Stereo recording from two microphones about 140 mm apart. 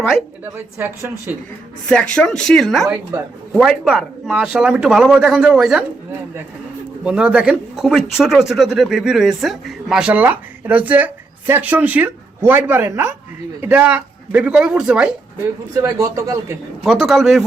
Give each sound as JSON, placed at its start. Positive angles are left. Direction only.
{"t": 0.5, "sound": "speech", "side_deg": -15}
{"t": 1.9, "sound": "speech", "side_deg": 5}
{"t": 7.0, "sound": "speech", "side_deg": -5}
{"t": 16.0, "sound": "a man's voice", "side_deg": -20}
{"t": 16.8, "sound": "speech", "side_deg": 0}